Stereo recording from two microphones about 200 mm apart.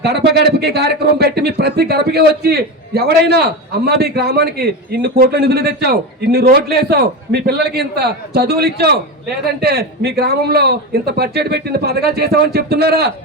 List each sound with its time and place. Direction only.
0.0 s speech: 55° right (ahead or behind)